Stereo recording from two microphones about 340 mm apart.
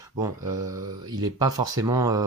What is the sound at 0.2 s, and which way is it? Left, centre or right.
Speech, centre.